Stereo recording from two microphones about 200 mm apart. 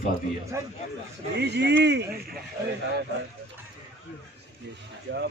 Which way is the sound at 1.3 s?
55° right (ahead or behind).